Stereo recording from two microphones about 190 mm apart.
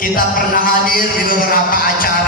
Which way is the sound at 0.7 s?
50° left (ahead or behind).